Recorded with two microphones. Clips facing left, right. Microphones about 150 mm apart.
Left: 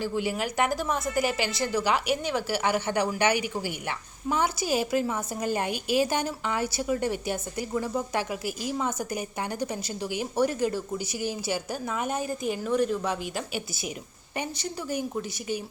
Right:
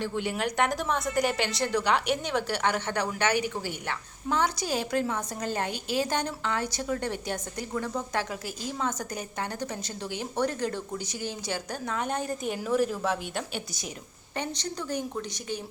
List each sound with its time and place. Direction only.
0.0 s a woman's voice: 5° left (ahead or behind)